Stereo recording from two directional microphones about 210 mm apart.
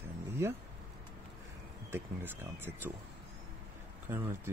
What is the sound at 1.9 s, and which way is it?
Speech, 10° right (ahead or behind).